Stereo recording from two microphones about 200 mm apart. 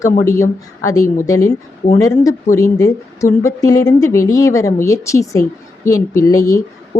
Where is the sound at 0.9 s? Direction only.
15° left (ahead or behind).